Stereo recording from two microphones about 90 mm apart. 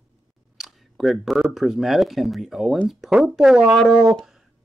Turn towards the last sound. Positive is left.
turn(degrees=-5)  # may be behind; listen again after turning